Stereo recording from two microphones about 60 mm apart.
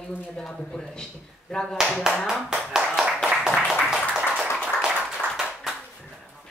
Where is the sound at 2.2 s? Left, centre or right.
Centre.